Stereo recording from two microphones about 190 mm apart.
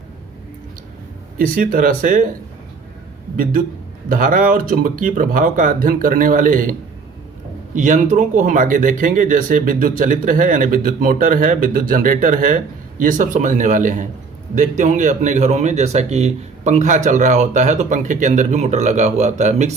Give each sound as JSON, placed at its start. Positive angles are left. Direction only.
{"t": 1.4, "sound": "speech", "side_deg": -45}
{"t": 3.3, "sound": "speech", "side_deg": -50}
{"t": 7.8, "sound": "speech", "side_deg": -40}